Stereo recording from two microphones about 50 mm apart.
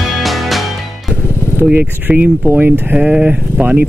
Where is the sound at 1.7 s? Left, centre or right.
Centre.